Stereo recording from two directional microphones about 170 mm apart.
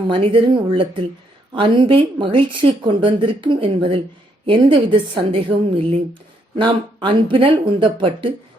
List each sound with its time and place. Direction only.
0.1 s a woman's voice: 30° right (ahead or behind)